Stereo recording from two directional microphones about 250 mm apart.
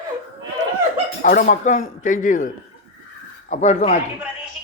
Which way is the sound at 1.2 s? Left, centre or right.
Left.